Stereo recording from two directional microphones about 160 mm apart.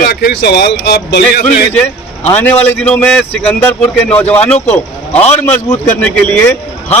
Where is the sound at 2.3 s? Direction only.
10° left (ahead or behind).